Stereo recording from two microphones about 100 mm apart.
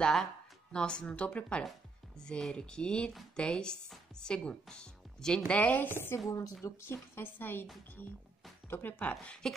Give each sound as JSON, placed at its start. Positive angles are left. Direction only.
{"t": 0.0, "sound": "speech", "side_deg": 5}
{"t": 6.2, "sound": "a woman's voice", "side_deg": 35}
{"t": 6.6, "sound": "a woman's voice", "side_deg": 25}